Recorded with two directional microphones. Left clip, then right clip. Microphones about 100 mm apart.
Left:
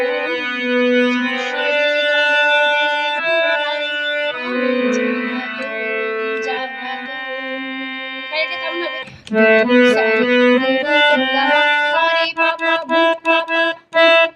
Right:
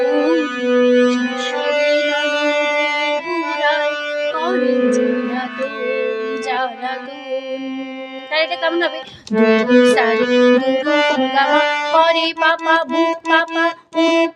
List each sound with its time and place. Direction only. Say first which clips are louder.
0.0 s music: right 3 dB; 25° right (ahead or behind)
1.5 s music: right 1 dB; 20° right (ahead or behind)
9.3 s music: left 1 dB; 30° right (ahead or behind)
10.7 s music: left 2 dB; 20° right (ahead or behind)